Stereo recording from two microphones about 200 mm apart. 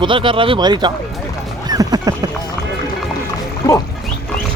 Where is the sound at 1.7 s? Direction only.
20° right (ahead or behind).